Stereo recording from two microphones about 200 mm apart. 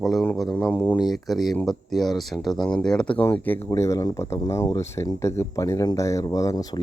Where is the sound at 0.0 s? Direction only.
Centre (ahead or behind).